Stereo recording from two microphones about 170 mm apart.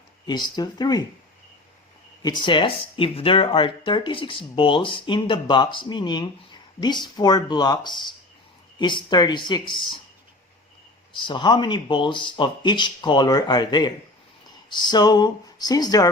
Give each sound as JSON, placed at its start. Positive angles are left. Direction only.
{"t": 0.3, "sound": "speech", "side_deg": 25}
{"t": 2.2, "sound": "speech", "side_deg": 30}
{"t": 11.2, "sound": "speech", "side_deg": 25}